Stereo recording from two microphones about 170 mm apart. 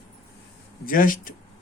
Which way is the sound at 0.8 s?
55° left (ahead or behind).